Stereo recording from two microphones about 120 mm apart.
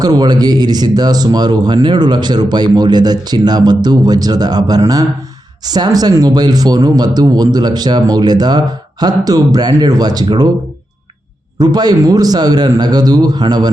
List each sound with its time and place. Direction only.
0.0 s speech: 35° right (ahead or behind)
11.6 s speech: 35° right (ahead or behind)